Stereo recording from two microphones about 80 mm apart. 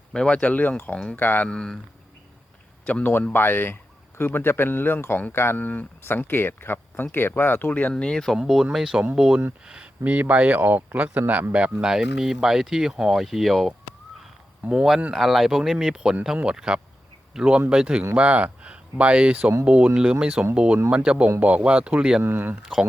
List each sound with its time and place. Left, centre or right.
0.1 s speech: centre
1.5 s speech: centre
2.8 s speech: centre
3.1 s speech: left; by 8.4 s centre
8.4 s speech: centre
22.2 s speech: right
22.6 s speech: centre